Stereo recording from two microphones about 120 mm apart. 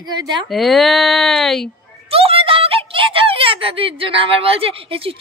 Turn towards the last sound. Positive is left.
turn(degrees=-50)  # may be behind; listen again after turning